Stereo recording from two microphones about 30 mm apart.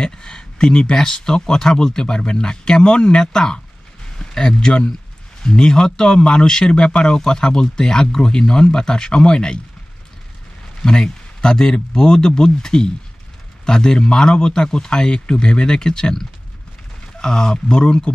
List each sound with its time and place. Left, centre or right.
0.0 s speech: left
4.6 s speech: left
10.8 s a sound: left
11.7 s speech: left
17.2 s speech: left